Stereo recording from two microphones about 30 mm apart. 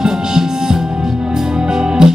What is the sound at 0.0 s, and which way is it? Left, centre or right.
Music, centre.